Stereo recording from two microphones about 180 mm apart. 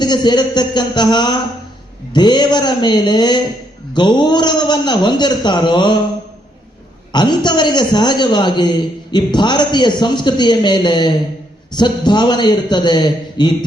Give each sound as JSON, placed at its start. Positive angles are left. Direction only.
{"t": 0.0, "sound": "a man's voice", "side_deg": 25}
{"t": 7.1, "sound": "a man's voice", "side_deg": 25}